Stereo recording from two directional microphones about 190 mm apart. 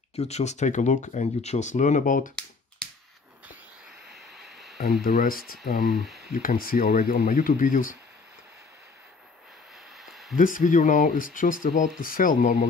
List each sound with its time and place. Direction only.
0.1 s speech: 35° left (ahead or behind)
4.2 s a sound: centre (ahead or behind)
5.0 s speech: 50° left (ahead or behind)
5.9 s speech: centre (ahead or behind)
6.4 s speech: 50° left (ahead or behind)
10.3 s speech: 45° left (ahead or behind)